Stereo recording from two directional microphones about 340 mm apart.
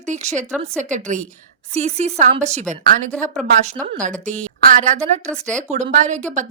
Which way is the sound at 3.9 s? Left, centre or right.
Right.